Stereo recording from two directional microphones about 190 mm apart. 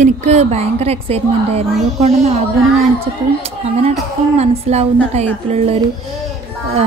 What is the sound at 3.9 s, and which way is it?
A woman's voice, 35° right (ahead or behind).